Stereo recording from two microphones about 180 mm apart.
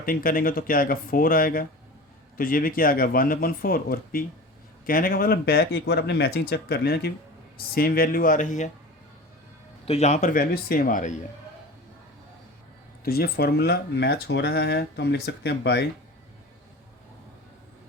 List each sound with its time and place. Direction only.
0.0 s speech: 50° left (ahead or behind)
9.8 s speech: 35° left (ahead or behind)
13.1 s speech: 60° left (ahead or behind)